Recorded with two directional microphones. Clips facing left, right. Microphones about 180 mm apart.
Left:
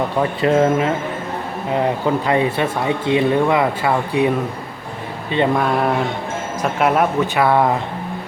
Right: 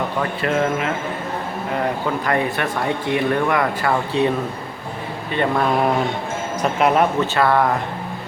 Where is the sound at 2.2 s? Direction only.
20° left (ahead or behind).